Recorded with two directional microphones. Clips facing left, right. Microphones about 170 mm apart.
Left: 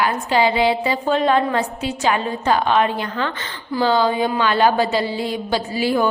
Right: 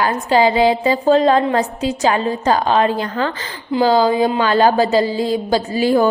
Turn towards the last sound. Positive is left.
turn(degrees=-45)  # may be behind; listen again after turning